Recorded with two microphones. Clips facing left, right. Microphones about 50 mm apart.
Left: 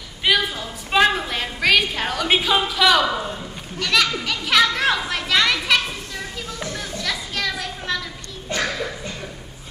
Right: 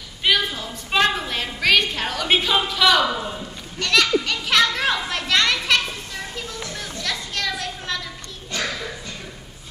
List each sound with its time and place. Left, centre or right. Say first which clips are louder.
0.2 s a woman's voice: left 1 dB; centre
6.8 s children playing: right 1 dB; centre
8.5 s a sound: left 3 dB; left